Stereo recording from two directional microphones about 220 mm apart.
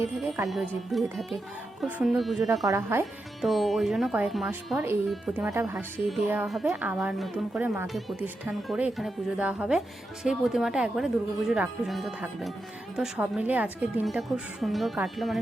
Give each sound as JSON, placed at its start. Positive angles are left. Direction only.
{"t": 0.4, "sound": "speech", "side_deg": 0}
{"t": 2.6, "sound": "speech", "side_deg": -15}
{"t": 3.4, "sound": "speech", "side_deg": 0}